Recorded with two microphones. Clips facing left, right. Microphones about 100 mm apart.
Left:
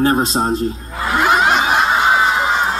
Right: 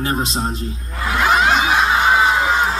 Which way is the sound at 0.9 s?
5° left (ahead or behind).